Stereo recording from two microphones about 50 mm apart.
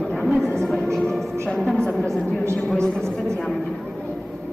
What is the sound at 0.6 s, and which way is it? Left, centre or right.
Music, centre.